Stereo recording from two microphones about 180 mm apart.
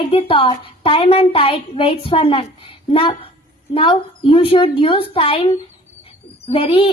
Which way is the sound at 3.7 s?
30° left (ahead or behind).